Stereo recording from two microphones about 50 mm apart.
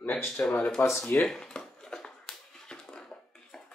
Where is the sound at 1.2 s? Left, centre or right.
Centre.